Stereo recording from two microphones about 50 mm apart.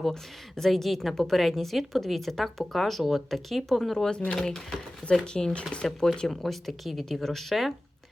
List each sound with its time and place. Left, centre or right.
0.0 s a woman's voice: centre
6.2 s a woman's voice: centre